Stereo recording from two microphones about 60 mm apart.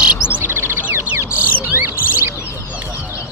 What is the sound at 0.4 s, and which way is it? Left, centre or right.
Chirp, right.